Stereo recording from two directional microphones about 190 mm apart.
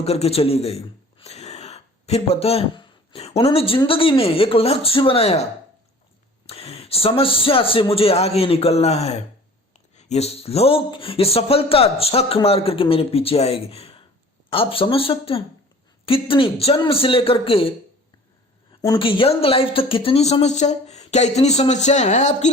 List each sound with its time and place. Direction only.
0.0 s a man's voice: 35° left (ahead or behind)
6.5 s a man's voice: 30° left (ahead or behind)
18.8 s speech: 25° left (ahead or behind)